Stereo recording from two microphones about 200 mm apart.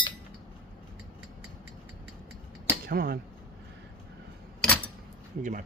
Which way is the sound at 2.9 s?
50° right (ahead or behind).